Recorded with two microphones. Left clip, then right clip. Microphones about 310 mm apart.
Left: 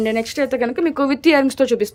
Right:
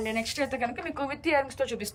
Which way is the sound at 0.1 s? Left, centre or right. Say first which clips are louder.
Left 10 dB; centre.